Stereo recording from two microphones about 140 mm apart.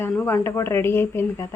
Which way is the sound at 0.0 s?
15° left (ahead or behind).